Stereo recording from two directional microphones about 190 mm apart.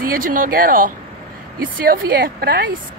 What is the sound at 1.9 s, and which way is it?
Speech, 50° right (ahead or behind).